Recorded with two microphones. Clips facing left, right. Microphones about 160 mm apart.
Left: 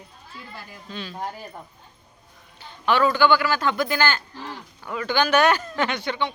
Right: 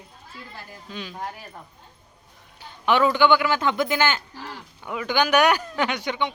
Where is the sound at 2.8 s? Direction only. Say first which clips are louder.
Even; 20° right (ahead or behind).